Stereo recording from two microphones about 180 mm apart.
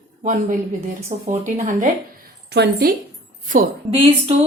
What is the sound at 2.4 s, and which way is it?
Speech, 65° right (ahead or behind).